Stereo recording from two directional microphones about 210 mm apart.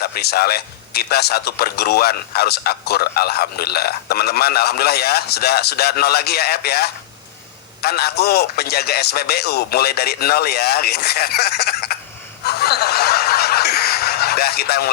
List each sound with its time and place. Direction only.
0.0 s a man's voice: 50° left (ahead or behind)
12.5 s snicker: 50° left (ahead or behind)